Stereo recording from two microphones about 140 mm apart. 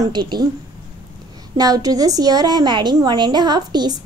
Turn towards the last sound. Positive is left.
turn(degrees=-30)  # may be behind; listen again after turning